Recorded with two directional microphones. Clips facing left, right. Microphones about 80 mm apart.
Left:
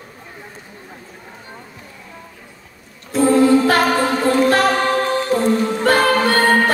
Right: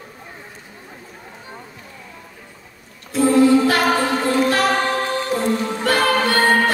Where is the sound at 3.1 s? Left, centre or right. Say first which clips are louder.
Left 1 dB; left.